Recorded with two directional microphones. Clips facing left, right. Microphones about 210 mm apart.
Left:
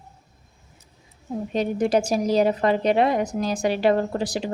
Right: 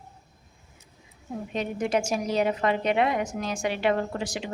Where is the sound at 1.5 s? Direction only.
35° left (ahead or behind).